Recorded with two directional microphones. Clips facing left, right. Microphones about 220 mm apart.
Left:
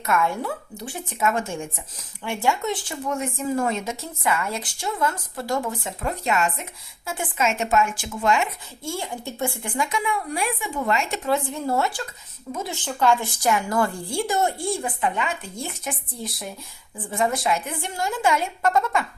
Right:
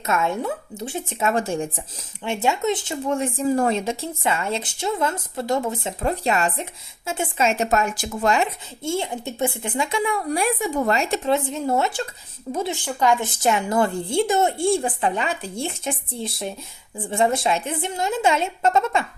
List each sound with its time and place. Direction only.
0.0 s speech: 20° right (ahead or behind)
2.2 s speech: 20° right (ahead or behind)
8.8 s speech: 25° right (ahead or behind)
10.1 s speech: 40° right (ahead or behind)
11.3 s speech: 20° right (ahead or behind)